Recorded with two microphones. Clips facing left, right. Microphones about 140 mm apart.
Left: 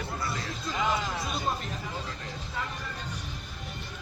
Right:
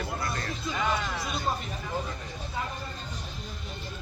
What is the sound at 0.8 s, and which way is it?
Speech, 20° left (ahead or behind).